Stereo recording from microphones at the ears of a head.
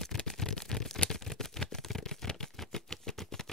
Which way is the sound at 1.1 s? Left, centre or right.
Centre.